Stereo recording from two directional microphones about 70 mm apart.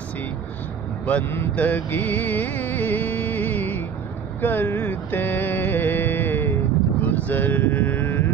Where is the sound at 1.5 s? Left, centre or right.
Left.